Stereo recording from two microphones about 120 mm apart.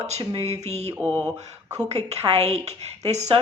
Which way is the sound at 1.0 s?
10° left (ahead or behind).